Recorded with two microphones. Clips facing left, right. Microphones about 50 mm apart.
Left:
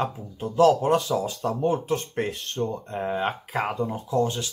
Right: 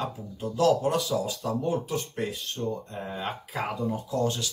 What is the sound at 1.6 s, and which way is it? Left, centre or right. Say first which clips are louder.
Speech: left 8 dB; left.